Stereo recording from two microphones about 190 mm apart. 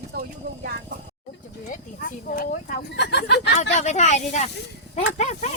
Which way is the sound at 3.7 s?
35° left (ahead or behind).